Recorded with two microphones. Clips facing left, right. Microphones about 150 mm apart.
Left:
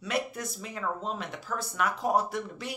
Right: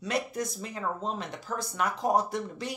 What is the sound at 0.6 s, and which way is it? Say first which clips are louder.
Speech: right 1 dB; 30° right (ahead or behind).